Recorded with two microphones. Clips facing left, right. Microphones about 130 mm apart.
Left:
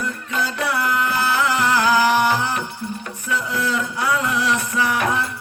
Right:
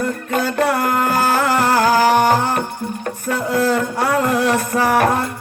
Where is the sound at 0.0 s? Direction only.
50° right (ahead or behind).